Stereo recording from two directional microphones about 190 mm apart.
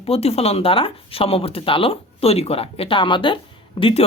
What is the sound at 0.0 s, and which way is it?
Speech, 30° left (ahead or behind).